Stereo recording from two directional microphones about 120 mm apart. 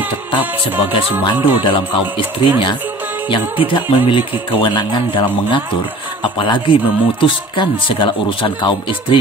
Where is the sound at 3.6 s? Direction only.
45° left (ahead or behind).